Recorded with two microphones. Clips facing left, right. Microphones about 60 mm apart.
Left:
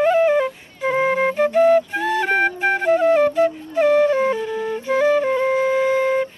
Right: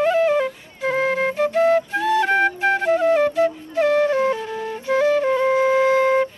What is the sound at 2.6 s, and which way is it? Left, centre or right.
Flute, centre.